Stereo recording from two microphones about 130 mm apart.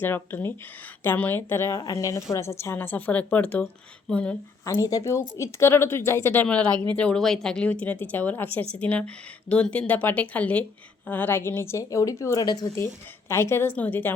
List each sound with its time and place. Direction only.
0.0 s a woman's voice: 15° left (ahead or behind)
4.6 s a woman's voice: 25° left (ahead or behind)